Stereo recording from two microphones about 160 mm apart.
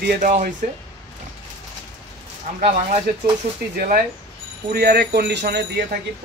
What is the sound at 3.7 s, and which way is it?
Speech, 65° right (ahead or behind).